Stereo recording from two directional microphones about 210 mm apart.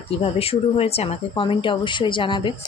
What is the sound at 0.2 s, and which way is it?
Speech, 30° left (ahead or behind).